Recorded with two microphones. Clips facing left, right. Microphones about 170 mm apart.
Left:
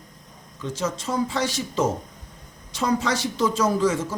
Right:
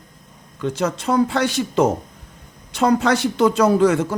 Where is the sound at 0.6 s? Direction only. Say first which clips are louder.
Right 6 dB; 65° right (ahead or behind).